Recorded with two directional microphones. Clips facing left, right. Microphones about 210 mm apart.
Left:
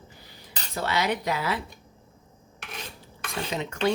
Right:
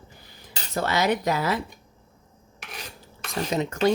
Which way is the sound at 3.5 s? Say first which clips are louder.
Right 4 dB; 40° right (ahead or behind).